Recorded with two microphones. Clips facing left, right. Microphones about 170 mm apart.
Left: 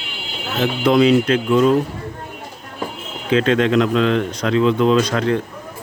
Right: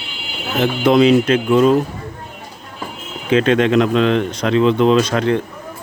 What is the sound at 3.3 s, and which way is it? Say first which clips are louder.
Speech: right 2 dB; 20° right (ahead or behind).